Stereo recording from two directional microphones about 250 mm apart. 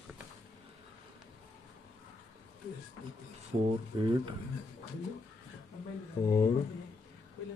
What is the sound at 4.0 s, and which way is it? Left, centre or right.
Speech, centre.